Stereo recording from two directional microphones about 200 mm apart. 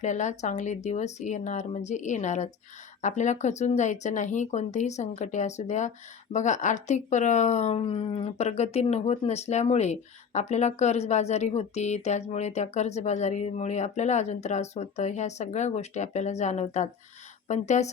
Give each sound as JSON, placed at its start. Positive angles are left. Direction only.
{"t": 0.0, "sound": "speech", "side_deg": 35}